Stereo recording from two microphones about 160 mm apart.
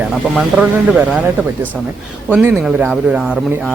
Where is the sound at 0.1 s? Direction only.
5° right (ahead or behind).